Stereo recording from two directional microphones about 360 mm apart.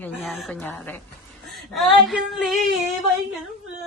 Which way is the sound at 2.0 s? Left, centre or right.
Centre.